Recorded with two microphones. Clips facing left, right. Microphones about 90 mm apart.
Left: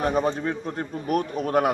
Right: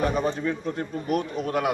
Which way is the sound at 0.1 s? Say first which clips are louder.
Left 2 dB; 40° left (ahead or behind).